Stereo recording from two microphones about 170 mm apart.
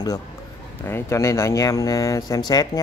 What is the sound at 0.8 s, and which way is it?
Speech, 15° left (ahead or behind).